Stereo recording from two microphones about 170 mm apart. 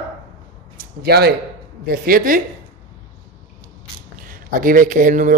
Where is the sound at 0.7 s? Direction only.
70° right (ahead or behind).